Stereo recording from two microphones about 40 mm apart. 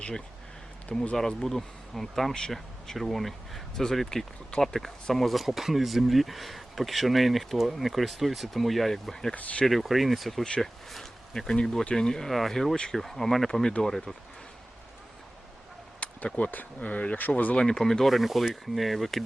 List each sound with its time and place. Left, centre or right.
0.9 s speech: centre
1.5 s speech: centre
9.3 s speech: left
9.6 s speech: centre
16.0 s a sound: left
16.5 s speech: left
17.7 s speech: centre
18.1 s speech: centre